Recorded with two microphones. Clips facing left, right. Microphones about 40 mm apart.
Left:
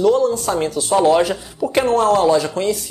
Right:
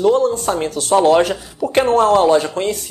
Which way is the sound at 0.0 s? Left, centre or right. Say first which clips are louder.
Right 1 dB; right.